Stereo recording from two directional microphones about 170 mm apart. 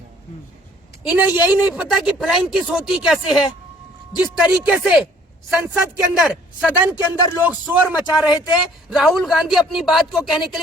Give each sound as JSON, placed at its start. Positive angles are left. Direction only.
{"t": 1.0, "sound": "speech", "side_deg": -10}
{"t": 6.9, "sound": "speech", "side_deg": 25}
{"t": 7.4, "sound": "speech", "side_deg": -10}